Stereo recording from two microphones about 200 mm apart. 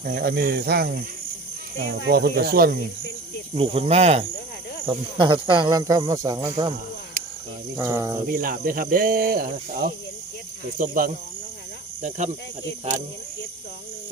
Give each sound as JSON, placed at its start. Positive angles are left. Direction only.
{"t": 0.0, "sound": "speech", "side_deg": -50}
{"t": 2.0, "sound": "speech", "side_deg": -50}
{"t": 3.5, "sound": "speech", "side_deg": -30}
{"t": 7.8, "sound": "cricket", "side_deg": -15}
{"t": 8.3, "sound": "speech", "side_deg": -45}